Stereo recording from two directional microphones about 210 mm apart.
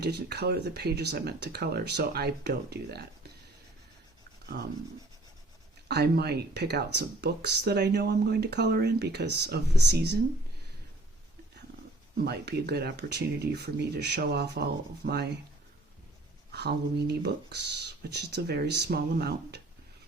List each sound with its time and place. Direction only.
0.0 s speech: 50° right (ahead or behind)
4.5 s speech: 50° right (ahead or behind)
5.9 s speech: 50° right (ahead or behind)
12.1 s speech: 50° right (ahead or behind)
16.5 s speech: 50° right (ahead or behind)